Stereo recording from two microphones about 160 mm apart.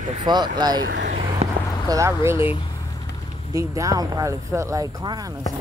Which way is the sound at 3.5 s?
20° right (ahead or behind).